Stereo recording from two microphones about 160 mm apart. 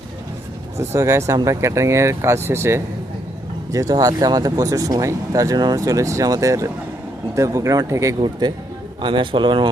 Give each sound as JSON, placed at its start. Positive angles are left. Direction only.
{"t": 0.8, "sound": "a man's voice", "side_deg": -15}